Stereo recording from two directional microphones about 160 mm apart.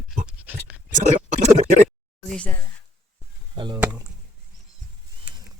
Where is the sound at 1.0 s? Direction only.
45° right (ahead or behind).